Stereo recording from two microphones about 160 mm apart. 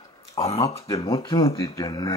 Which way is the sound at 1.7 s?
20° left (ahead or behind).